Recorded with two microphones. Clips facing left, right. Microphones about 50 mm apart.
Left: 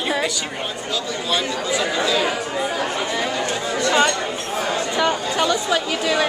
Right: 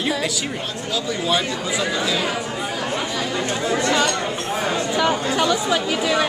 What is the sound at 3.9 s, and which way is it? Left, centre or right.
Chatter, centre.